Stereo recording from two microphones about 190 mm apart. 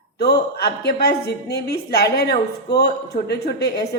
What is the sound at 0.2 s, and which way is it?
A woman's voice, 60° left (ahead or behind).